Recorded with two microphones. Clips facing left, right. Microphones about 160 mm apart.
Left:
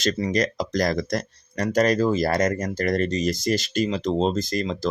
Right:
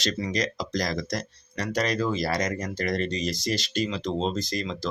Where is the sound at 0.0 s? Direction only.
50° left (ahead or behind).